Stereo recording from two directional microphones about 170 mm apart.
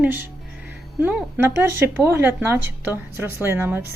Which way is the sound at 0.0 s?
10° right (ahead or behind).